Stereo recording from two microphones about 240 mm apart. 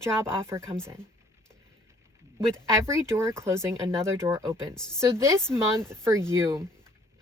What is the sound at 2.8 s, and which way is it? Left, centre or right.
A woman's voice, centre.